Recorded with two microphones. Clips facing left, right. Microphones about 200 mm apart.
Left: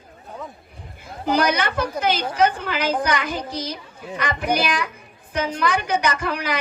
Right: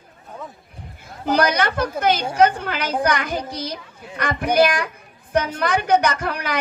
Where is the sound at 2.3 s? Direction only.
55° right (ahead or behind).